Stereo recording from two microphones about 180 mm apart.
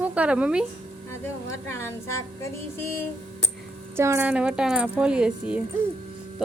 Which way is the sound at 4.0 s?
15° right (ahead or behind).